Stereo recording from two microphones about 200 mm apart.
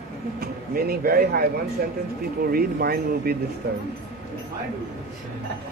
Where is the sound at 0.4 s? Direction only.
50° right (ahead or behind).